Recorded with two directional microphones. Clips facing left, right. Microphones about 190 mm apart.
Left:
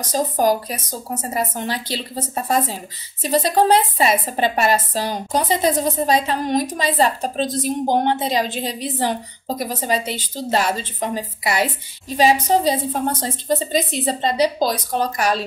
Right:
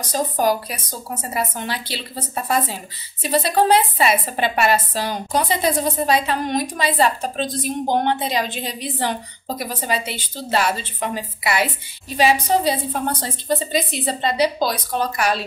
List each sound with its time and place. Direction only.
0.1 s a woman's voice: 40° left (ahead or behind)